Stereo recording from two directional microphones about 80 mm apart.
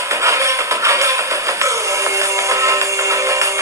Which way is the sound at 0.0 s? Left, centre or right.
Right.